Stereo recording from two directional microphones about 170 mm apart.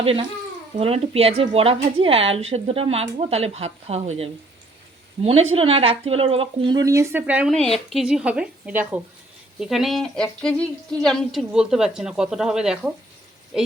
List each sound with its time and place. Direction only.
0.0 s speech: 35° right (ahead or behind); by 7.5 s 10° right (ahead or behind)
7.5 s speech: 5° left (ahead or behind)